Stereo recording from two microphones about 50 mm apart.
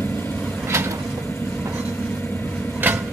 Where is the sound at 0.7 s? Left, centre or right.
Right.